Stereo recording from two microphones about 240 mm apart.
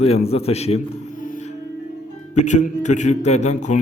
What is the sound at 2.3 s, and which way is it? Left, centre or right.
A man's voice, left.